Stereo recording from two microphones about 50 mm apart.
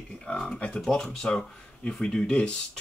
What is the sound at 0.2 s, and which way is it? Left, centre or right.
Speech, centre.